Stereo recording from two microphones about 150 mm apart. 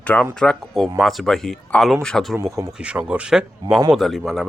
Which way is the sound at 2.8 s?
10° right (ahead or behind).